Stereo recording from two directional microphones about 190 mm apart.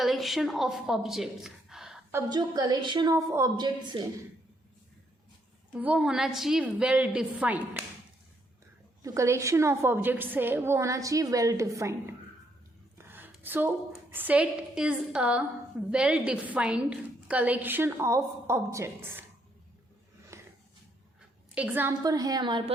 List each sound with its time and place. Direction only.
0.0 s a woman's voice: centre (ahead or behind)
2.1 s a woman's voice: 20° right (ahead or behind)
5.7 s a woman's voice: 10° right (ahead or behind)
9.0 s a woman's voice: 15° right (ahead or behind)
13.0 s a woman's voice: 10° right (ahead or behind)
20.3 s a sound: 15° right (ahead or behind)
21.5 s a woman's voice: 10° right (ahead or behind)